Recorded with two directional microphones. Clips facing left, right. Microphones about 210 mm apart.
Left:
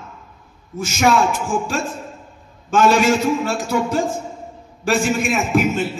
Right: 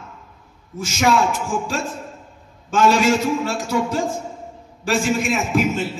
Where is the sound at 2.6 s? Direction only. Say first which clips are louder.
Left 1 dB; 55° left (ahead or behind).